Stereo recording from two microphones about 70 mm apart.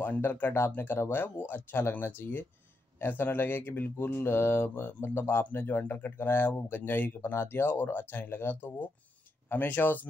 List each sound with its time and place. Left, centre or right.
0.0 s mantra: left
9.5 s speech: left